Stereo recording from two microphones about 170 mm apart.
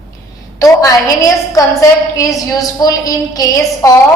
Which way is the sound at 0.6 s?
20° left (ahead or behind).